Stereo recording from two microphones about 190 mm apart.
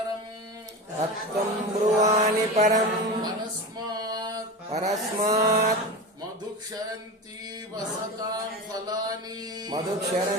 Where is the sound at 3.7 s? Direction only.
20° right (ahead or behind).